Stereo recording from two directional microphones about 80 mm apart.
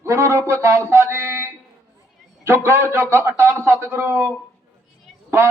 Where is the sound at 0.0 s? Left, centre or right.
Right.